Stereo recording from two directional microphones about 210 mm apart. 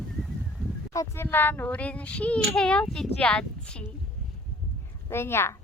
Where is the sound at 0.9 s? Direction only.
15° left (ahead or behind).